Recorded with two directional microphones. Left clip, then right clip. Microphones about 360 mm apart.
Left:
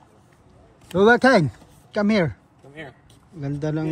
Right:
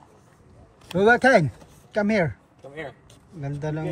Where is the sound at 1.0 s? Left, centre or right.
Centre.